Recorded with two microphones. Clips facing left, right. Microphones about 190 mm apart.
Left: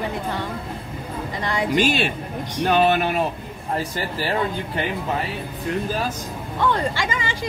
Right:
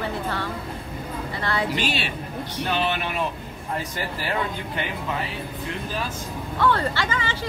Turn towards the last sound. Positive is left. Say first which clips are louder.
# left 1 dB
turn(degrees=15)  # may be behind; listen again after turning